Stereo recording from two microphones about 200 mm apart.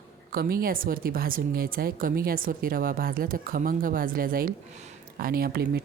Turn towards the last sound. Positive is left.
turn(degrees=-50)  # may be behind; listen again after turning